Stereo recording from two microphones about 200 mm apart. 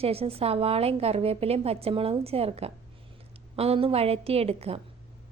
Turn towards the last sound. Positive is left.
turn(degrees=-30)  # may be behind; listen again after turning